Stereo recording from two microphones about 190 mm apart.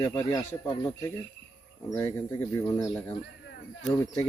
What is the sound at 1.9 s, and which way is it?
Speech, 20° left (ahead or behind).